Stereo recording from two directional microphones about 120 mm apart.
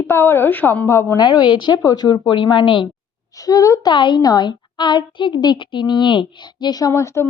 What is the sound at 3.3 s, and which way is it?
Speech, 30° left (ahead or behind).